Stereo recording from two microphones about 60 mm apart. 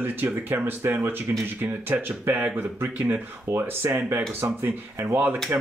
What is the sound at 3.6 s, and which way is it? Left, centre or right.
Speech, right.